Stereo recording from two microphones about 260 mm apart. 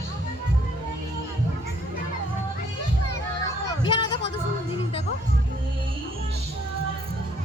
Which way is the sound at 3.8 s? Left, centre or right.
Centre.